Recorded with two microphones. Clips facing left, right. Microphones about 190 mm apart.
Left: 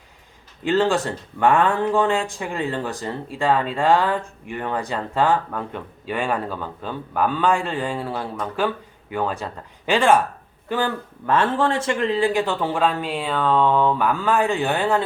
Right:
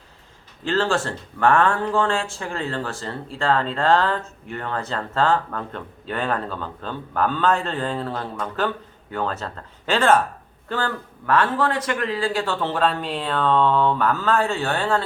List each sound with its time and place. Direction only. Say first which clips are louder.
0.6 s speech: left 3 dB; 15° left (ahead or behind)